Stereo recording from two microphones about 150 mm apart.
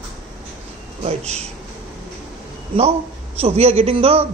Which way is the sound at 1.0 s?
45° right (ahead or behind).